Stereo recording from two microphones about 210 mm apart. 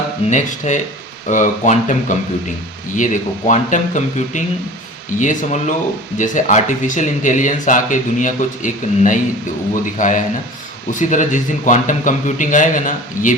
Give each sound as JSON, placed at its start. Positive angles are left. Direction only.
{"t": 0.3, "sound": "speech", "side_deg": 35}